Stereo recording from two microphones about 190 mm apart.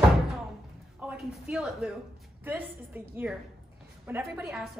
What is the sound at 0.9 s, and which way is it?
A woman's voice, centre (ahead or behind).